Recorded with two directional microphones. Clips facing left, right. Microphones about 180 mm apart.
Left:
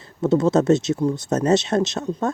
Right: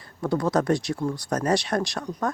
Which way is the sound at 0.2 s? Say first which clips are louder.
Left 6 dB; 25° left (ahead or behind).